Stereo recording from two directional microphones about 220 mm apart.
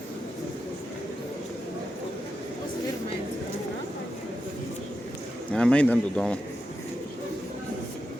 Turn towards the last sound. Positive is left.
turn(degrees=5)  # may be behind; listen again after turning